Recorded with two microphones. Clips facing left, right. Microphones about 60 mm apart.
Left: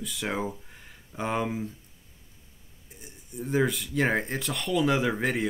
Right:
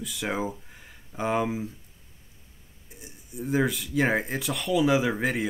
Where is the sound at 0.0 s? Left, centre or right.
Centre.